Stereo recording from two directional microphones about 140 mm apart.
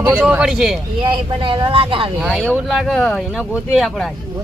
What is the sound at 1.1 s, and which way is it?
Speech, 35° right (ahead or behind).